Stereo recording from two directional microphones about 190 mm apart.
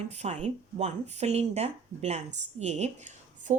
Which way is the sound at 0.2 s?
35° right (ahead or behind).